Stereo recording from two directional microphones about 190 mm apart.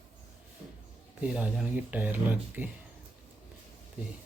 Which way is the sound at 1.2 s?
5° right (ahead or behind).